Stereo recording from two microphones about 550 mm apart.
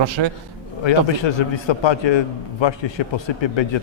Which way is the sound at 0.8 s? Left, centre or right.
Left.